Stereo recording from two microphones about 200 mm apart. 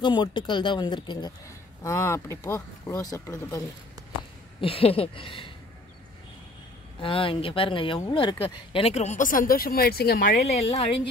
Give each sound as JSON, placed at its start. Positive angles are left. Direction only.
{"t": 0.0, "sound": "speech", "side_deg": 25}
{"t": 4.6, "sound": "speech", "side_deg": 30}
{"t": 7.0, "sound": "speech", "side_deg": 25}
{"t": 10.5, "sound": "speech", "side_deg": 30}